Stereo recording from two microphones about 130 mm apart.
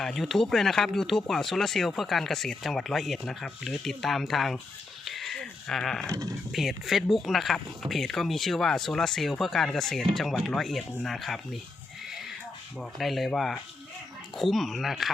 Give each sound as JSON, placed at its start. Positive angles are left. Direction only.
{"t": 0.0, "sound": "speech", "side_deg": 0}
{"t": 5.0, "sound": "a sound", "side_deg": 0}
{"t": 6.1, "sound": "speech", "side_deg": -25}
{"t": 6.5, "sound": "speech", "side_deg": 0}
{"t": 12.8, "sound": "speech", "side_deg": 0}